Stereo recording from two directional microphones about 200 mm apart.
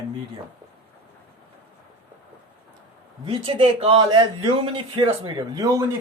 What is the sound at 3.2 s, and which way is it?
A man's voice, 25° right (ahead or behind).